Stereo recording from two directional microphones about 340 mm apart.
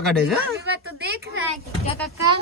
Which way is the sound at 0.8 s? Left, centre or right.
Right.